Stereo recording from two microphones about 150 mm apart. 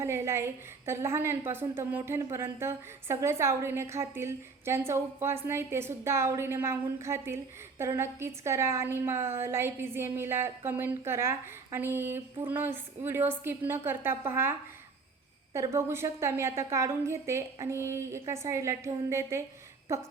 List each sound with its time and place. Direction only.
0.0 s a woman's voice: 15° right (ahead or behind)
15.5 s a woman's voice: 20° right (ahead or behind)